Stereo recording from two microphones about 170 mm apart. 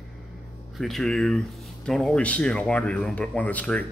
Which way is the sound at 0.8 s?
Centre (ahead or behind).